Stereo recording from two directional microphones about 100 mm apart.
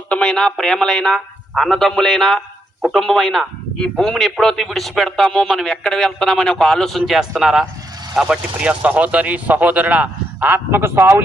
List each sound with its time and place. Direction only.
0.1 s speech: 5° left (ahead or behind); by 11.2 s 25° right (ahead or behind)